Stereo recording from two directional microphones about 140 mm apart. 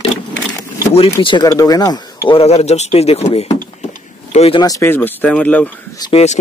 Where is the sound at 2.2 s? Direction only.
45° left (ahead or behind).